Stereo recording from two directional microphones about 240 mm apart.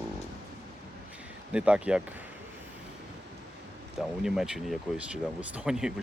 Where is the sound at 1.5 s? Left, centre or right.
Centre.